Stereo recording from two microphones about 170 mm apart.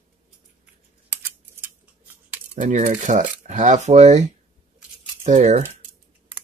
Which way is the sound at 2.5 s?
45° right (ahead or behind).